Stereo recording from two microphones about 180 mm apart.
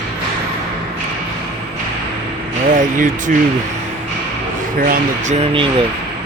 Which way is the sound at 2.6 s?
45° right (ahead or behind).